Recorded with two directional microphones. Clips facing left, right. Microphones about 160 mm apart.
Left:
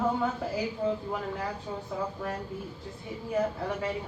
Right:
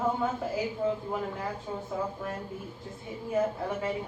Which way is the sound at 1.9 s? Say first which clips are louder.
Left 1 dB; 25° right (ahead or behind).